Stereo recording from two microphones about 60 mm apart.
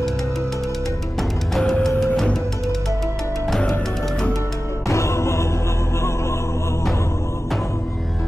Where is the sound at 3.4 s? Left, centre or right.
Centre.